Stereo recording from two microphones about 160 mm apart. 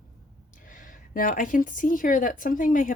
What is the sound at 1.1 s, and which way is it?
Speech, 60° left (ahead or behind).